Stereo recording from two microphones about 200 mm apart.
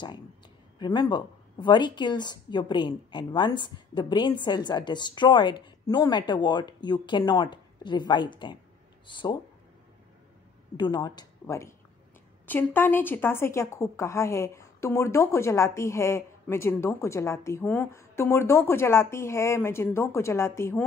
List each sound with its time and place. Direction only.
0.7 s speech: 20° left (ahead or behind)
10.8 s speech: 20° left (ahead or behind)